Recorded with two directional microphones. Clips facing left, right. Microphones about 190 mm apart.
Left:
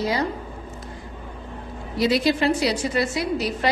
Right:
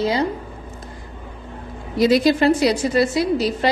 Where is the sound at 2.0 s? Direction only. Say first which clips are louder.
Right 5 dB; 45° right (ahead or behind).